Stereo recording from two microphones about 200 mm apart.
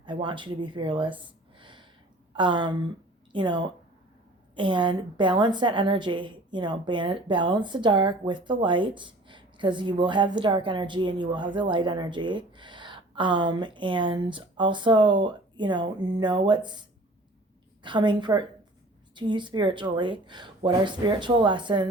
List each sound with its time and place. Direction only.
0.0 s a woman's voice: 25° right (ahead or behind)
1.5 s a sound: 25° right (ahead or behind)
2.3 s a woman's voice: 25° right (ahead or behind)
17.8 s a woman's voice: 25° right (ahead or behind)